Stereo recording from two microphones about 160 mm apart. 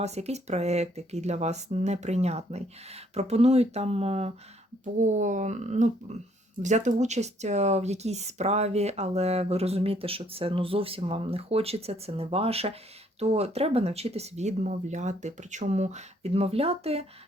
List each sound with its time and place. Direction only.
0.0 s speech: 45° right (ahead or behind)